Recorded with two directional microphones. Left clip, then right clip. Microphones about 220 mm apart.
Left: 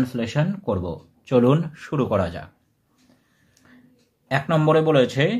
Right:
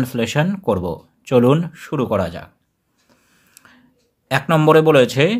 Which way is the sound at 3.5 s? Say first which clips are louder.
Right 5 dB; 30° right (ahead or behind).